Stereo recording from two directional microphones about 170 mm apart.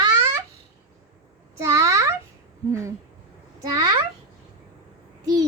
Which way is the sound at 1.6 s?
20° right (ahead or behind).